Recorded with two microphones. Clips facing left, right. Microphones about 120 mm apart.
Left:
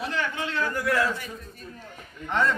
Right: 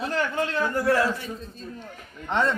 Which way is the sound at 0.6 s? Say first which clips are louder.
Right 2 dB; 30° right (ahead or behind).